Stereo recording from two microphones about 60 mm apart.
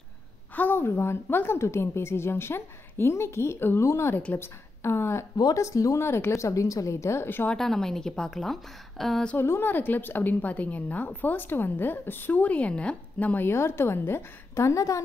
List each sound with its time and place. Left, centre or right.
0.6 s a woman's voice: left
5.5 s speech: left
6.0 s a woman's voice: left
7.5 s a woman's voice: centre
9.4 s a woman's voice: left
13.5 s a woman's voice: left
14.5 s speech: left